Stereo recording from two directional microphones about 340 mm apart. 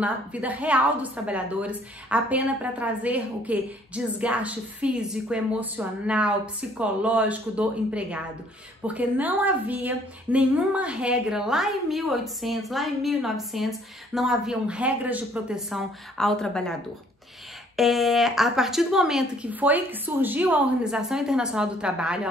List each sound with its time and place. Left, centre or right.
0.0 s a woman's voice: centre
17.7 s a woman's voice: centre